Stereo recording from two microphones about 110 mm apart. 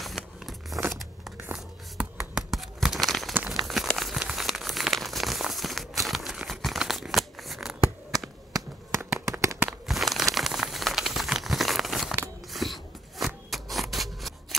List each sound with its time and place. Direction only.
0.0 s vehicle: centre (ahead or behind)
0.8 s a sound: centre (ahead or behind)
1.5 s tearing: 5° right (ahead or behind)
3.6 s crumpling: centre (ahead or behind)
8.5 s a sound: 30° right (ahead or behind)
9.7 s crumpling: centre (ahead or behind)
13.5 s scissors: centre (ahead or behind)